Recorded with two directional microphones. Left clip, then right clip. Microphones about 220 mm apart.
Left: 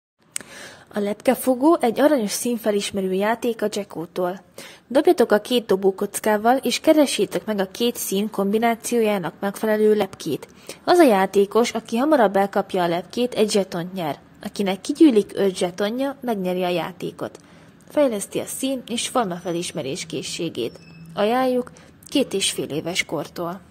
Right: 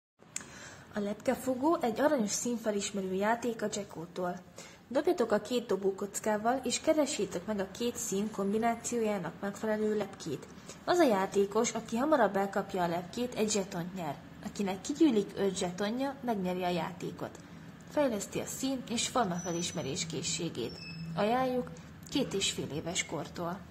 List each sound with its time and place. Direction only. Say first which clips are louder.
0.9 s a woman's voice: left 12 dB; 40° left (ahead or behind)